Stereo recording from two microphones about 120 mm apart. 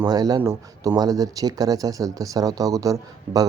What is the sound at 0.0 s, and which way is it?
Speech, 35° right (ahead or behind).